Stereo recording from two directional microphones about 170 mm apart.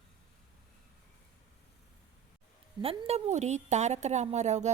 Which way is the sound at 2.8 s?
35° right (ahead or behind).